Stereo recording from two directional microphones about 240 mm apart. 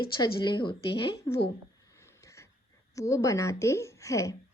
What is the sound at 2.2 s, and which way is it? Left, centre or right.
Wheeze, centre.